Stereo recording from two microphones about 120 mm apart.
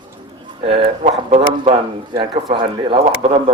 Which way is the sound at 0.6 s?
50° right (ahead or behind).